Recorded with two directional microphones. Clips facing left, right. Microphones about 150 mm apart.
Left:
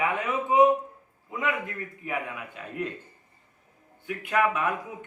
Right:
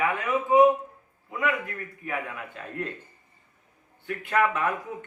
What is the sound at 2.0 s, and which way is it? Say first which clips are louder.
Speech: even; 15° left (ahead or behind).